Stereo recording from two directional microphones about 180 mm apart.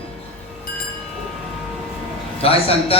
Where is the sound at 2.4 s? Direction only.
30° left (ahead or behind).